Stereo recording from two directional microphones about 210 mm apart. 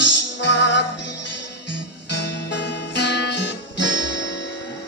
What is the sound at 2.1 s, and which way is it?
Guitar, 55° left (ahead or behind).